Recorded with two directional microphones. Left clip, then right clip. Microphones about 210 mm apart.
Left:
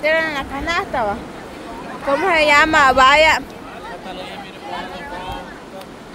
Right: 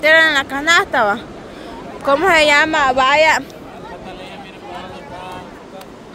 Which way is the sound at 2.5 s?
15° right (ahead or behind).